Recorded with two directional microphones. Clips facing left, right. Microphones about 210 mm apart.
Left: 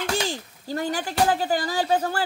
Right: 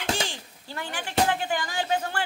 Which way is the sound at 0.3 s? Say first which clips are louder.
Left 10 dB; 40° left (ahead or behind).